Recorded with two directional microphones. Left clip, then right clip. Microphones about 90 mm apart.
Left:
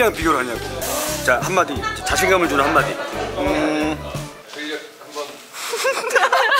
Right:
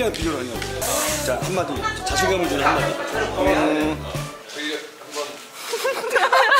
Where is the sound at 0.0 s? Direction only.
30° left (ahead or behind).